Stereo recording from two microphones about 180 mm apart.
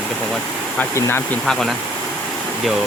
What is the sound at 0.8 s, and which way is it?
Speech, 15° left (ahead or behind).